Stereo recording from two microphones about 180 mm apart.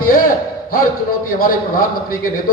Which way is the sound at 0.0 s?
50° left (ahead or behind).